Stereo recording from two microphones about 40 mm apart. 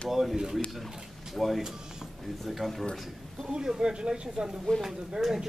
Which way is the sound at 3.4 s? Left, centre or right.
Centre.